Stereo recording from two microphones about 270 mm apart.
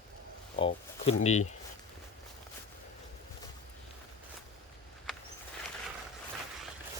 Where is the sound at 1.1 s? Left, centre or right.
Left.